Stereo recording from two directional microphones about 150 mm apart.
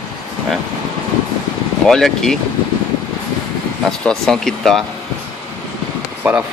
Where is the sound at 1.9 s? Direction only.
5° left (ahead or behind).